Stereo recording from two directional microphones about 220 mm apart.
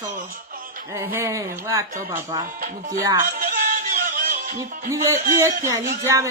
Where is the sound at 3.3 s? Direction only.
40° right (ahead or behind).